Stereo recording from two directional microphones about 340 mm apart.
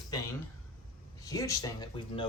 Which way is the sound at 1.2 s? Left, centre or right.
Centre.